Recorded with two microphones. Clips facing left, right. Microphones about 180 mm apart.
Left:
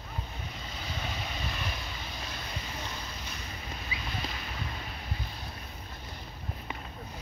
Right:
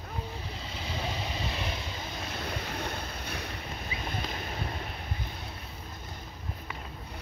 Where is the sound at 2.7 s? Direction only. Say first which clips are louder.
Right 4 dB; 60° right (ahead or behind).